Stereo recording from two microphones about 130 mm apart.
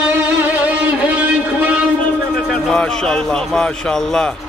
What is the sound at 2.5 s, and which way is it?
A man's voice, 5° left (ahead or behind).